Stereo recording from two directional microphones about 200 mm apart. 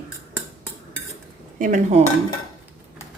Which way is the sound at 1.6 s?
35° right (ahead or behind).